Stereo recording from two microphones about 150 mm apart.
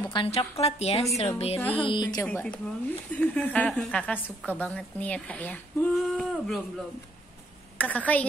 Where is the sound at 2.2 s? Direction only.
10° left (ahead or behind).